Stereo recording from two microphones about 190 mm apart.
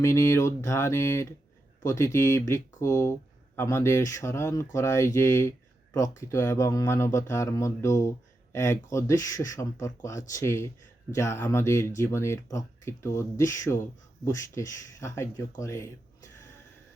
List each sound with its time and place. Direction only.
0.0 s speech: 15° left (ahead or behind)